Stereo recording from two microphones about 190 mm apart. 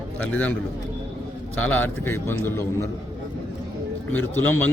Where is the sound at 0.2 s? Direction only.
10° left (ahead or behind).